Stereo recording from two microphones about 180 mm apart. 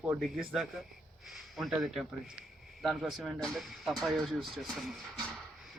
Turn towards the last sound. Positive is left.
turn(degrees=0)  # may be behind; listen again after turning